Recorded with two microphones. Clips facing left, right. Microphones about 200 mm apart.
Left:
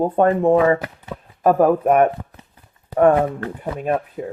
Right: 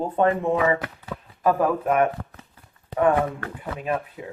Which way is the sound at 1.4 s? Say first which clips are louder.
Left 6 dB; 45° left (ahead or behind).